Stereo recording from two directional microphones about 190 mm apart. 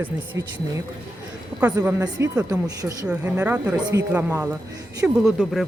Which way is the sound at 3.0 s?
5° right (ahead or behind).